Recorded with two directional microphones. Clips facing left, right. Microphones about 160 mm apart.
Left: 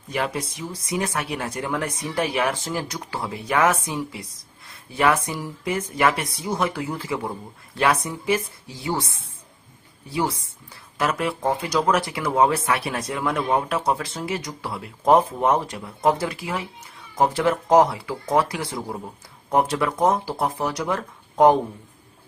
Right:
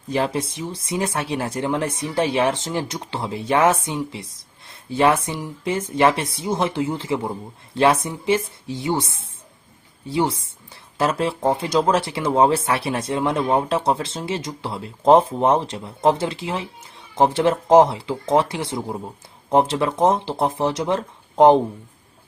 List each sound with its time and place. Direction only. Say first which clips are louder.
0.1 s speech: right 4 dB; 30° right (ahead or behind)
10.1 s speech: right 4 dB; 25° right (ahead or behind)